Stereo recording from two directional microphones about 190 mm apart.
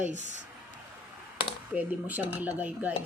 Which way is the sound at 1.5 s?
10° right (ahead or behind).